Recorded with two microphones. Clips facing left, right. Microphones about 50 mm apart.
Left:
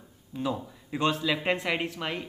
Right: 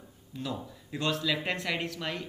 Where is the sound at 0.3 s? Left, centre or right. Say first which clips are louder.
Left 5 dB; left.